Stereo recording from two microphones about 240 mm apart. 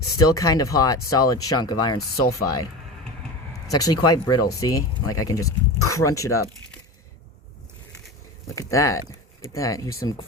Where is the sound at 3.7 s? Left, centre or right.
Centre.